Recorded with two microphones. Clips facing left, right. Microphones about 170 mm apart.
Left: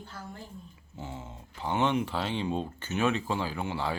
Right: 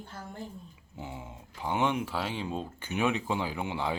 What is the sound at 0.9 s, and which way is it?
Speech, 15° right (ahead or behind).